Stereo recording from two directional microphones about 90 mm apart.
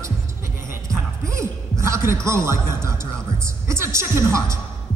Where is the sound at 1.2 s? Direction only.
35° right (ahead or behind).